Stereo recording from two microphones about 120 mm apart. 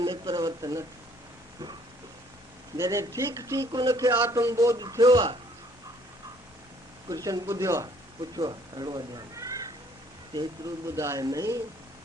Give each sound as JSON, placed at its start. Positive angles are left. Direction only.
{"t": 0.0, "sound": "speech", "side_deg": -35}
{"t": 2.7, "sound": "speech", "side_deg": -25}
{"t": 7.3, "sound": "speech", "side_deg": -30}
{"t": 8.4, "sound": "speech", "side_deg": -35}
{"t": 10.8, "sound": "speech", "side_deg": -25}